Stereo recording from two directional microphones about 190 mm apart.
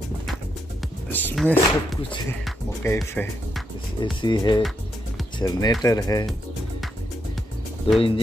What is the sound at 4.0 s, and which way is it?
Speech, 25° left (ahead or behind).